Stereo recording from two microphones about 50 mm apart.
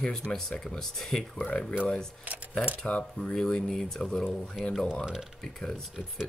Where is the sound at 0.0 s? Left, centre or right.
Centre.